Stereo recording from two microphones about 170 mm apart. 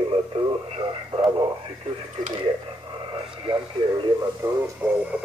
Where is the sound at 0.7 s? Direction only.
30° right (ahead or behind).